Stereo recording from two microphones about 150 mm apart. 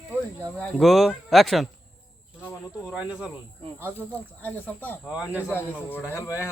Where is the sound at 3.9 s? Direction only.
10° left (ahead or behind).